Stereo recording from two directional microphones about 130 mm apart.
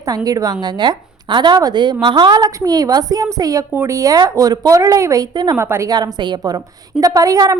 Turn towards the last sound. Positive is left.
turn(degrees=-25)  # may be behind; listen again after turning